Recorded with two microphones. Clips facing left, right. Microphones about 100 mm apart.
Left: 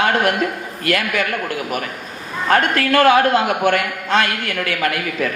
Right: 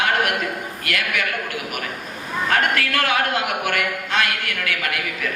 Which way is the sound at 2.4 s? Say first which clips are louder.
Left 5 dB; 35° left (ahead or behind).